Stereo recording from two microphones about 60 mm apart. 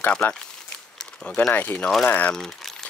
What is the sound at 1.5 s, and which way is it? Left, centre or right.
Speech, left.